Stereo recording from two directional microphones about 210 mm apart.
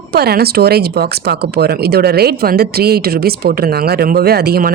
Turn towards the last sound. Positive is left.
turn(degrees=-45)  # may be behind; listen again after turning